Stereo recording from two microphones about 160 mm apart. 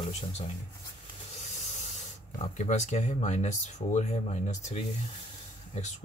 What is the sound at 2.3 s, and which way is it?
Speech, 45° left (ahead or behind).